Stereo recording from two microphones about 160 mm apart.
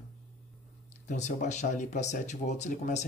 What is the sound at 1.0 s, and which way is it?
Speech, 50° left (ahead or behind).